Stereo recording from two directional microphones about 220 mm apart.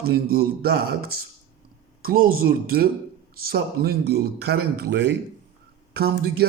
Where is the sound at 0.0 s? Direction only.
45° right (ahead or behind).